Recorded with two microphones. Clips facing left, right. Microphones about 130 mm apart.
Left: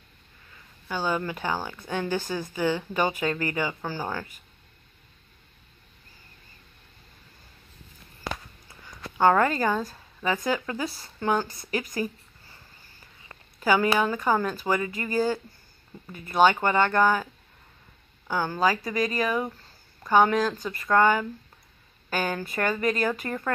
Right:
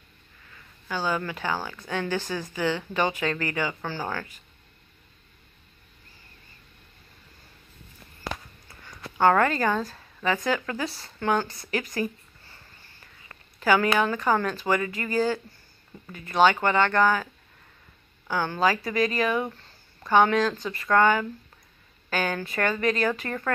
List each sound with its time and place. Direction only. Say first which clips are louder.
0.8 s speech: even; 15° left (ahead or behind)
8.6 s a sound: left 1 dB; 10° left (ahead or behind)
9.8 s a woman's voice: right 1 dB; 15° left (ahead or behind)
13.0 s speech: left 2 dB; 10° left (ahead or behind)